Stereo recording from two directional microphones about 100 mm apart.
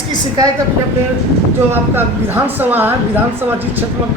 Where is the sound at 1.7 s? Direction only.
20° right (ahead or behind).